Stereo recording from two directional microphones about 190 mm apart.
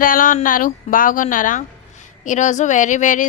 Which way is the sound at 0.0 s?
45° left (ahead or behind).